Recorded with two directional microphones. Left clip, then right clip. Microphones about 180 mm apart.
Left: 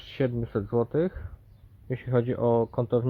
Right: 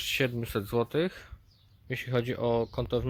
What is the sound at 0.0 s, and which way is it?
Speech, 15° right (ahead or behind).